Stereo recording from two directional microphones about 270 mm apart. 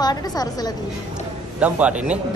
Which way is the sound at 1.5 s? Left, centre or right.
Centre.